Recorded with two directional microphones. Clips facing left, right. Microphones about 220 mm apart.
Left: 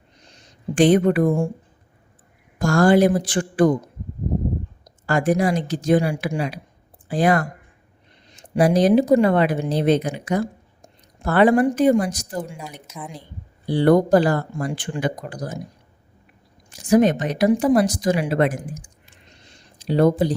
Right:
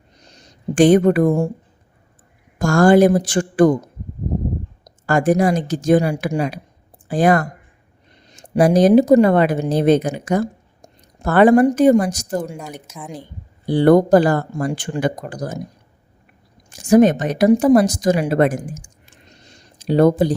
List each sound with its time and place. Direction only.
0.2 s a sound: 40° right (ahead or behind)
2.6 s speech: 45° right (ahead or behind)
5.0 s speech: 45° right (ahead or behind)
16.7 s a woman's voice: 45° right (ahead or behind)